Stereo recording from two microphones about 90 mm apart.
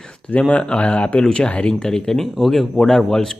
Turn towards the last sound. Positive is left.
turn(degrees=5)  # may be behind; listen again after turning